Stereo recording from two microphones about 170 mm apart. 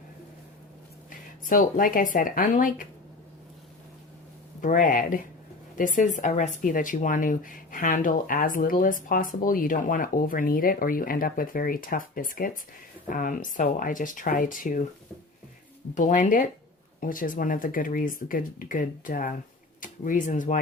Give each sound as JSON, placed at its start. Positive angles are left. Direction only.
{"t": 1.5, "sound": "speech", "side_deg": 55}
{"t": 4.6, "sound": "speech", "side_deg": 50}
{"t": 16.0, "sound": "speech", "side_deg": 50}